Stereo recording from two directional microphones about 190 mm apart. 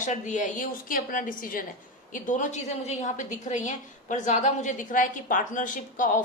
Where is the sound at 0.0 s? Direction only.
40° left (ahead or behind).